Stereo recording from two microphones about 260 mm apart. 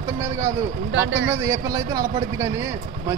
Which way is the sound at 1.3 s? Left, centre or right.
Centre.